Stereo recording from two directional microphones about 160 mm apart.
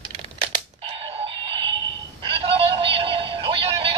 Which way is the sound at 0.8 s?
35° right (ahead or behind).